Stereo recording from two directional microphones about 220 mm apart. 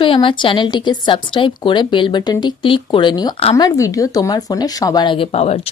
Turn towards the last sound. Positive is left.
turn(degrees=30)  # may be behind; listen again after turning